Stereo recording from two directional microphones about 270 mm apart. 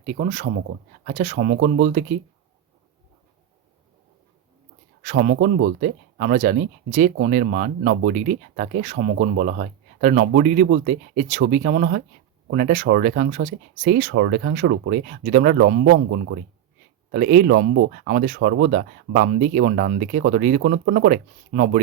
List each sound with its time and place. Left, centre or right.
0.0 s speech: right
5.0 s speech: right
17.1 s speech: right